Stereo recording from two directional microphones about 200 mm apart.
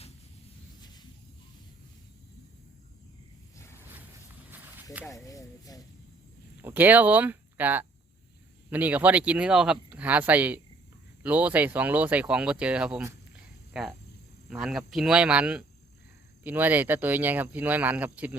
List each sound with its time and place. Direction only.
3.8 s a sound: 10° right (ahead or behind)
5.0 s speech: 15° left (ahead or behind)
6.6 s speech: 10° right (ahead or behind)